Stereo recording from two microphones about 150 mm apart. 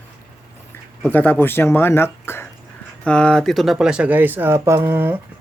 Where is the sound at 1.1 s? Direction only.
10° left (ahead or behind).